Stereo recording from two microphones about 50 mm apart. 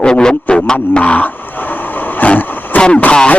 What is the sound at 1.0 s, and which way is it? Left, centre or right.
Vehicle, left.